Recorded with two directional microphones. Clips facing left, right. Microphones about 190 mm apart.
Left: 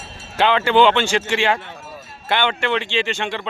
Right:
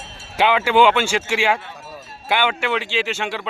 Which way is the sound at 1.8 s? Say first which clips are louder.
Even; 40° right (ahead or behind).